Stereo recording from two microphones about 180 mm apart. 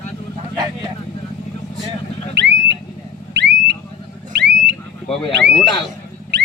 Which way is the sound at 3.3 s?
70° right (ahead or behind).